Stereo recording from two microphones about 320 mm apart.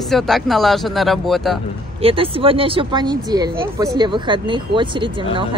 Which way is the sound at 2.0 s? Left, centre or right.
Centre.